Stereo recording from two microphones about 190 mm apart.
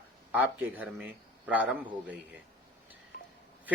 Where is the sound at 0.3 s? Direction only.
10° right (ahead or behind).